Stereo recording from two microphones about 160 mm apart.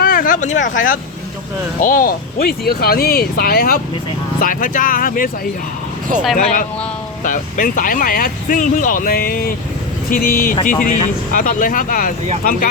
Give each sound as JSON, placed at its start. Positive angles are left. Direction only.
{"t": 0.0, "sound": "a sound", "side_deg": 60}
{"t": 1.8, "sound": "speech", "side_deg": 60}
{"t": 6.3, "sound": "speech", "side_deg": 55}